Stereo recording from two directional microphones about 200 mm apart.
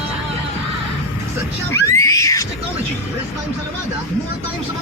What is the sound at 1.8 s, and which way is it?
Screaming, 15° left (ahead or behind).